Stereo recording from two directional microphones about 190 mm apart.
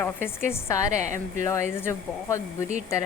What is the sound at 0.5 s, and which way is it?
Speech, 15° left (ahead or behind).